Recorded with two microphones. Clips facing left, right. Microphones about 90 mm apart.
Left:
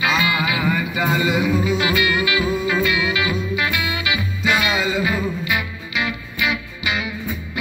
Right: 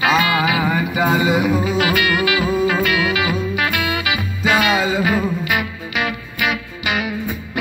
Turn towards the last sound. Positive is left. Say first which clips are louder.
# right 3 dB
turn(degrees=-55)  # may be behind; listen again after turning